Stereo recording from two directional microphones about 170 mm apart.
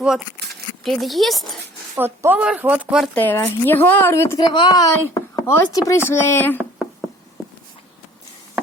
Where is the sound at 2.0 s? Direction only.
10° right (ahead or behind).